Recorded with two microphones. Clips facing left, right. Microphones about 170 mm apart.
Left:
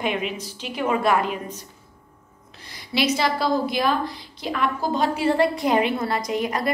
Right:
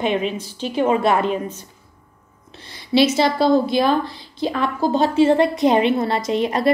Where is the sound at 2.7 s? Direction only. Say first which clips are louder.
Right 7 dB; 25° right (ahead or behind).